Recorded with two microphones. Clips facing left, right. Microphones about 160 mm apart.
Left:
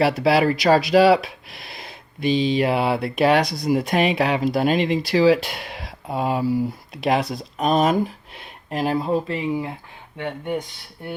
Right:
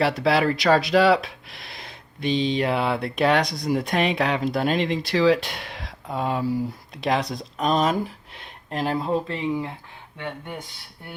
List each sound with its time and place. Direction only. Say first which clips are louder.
0.0 s speech: left 3 dB; 10° left (ahead or behind)